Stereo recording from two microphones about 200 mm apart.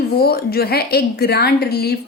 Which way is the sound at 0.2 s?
50° left (ahead or behind).